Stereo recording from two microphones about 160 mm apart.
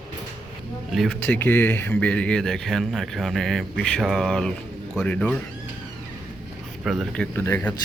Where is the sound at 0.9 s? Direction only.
Centre (ahead or behind).